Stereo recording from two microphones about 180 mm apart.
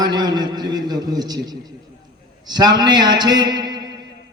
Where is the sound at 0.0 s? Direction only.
25° right (ahead or behind).